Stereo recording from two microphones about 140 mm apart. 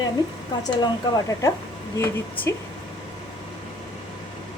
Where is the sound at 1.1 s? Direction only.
30° left (ahead or behind).